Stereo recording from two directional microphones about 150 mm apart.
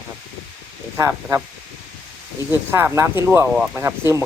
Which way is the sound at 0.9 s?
15° right (ahead or behind).